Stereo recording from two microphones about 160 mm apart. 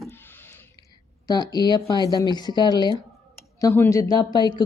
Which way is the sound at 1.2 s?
25° left (ahead or behind).